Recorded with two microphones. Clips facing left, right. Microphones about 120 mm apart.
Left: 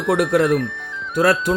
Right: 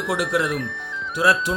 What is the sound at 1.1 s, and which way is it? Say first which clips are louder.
Speech: left 3 dB; 55° left (ahead or behind).